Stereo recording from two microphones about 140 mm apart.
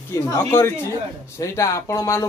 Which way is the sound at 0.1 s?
20° left (ahead or behind).